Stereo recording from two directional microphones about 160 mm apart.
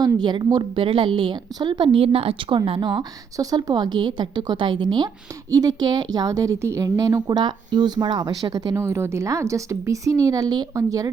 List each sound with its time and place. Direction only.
0.0 s a woman's voice: 25° right (ahead or behind)